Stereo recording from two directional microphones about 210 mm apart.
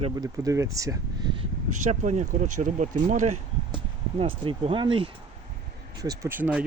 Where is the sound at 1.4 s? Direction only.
35° right (ahead or behind).